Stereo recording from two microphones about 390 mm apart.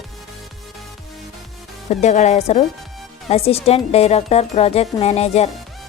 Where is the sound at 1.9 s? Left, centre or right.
Centre.